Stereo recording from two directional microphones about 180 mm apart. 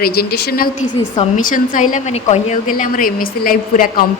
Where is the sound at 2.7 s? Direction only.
50° left (ahead or behind).